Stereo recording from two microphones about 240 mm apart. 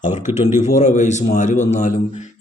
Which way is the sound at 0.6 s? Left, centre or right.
Left.